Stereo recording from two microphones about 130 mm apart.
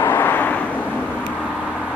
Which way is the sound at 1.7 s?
5° right (ahead or behind).